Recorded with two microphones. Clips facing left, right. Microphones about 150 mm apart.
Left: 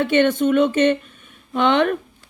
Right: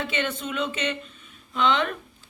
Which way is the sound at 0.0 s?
55° left (ahead or behind).